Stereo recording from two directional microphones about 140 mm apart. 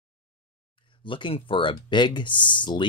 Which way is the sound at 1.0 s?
35° left (ahead or behind).